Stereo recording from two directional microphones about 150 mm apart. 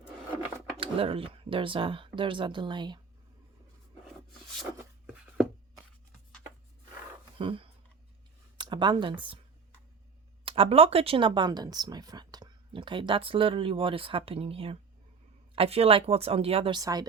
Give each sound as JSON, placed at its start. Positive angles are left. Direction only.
{"t": 0.8, "sound": "speech", "side_deg": -40}
{"t": 7.3, "sound": "speech", "side_deg": -35}
{"t": 10.4, "sound": "speech", "side_deg": -40}
{"t": 16.8, "sound": "speech", "side_deg": -25}